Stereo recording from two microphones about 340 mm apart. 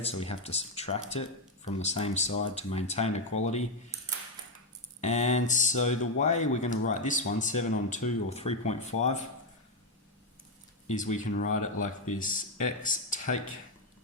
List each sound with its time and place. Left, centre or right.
0.0 s speech: centre
4.9 s speech: centre
10.8 s speech: left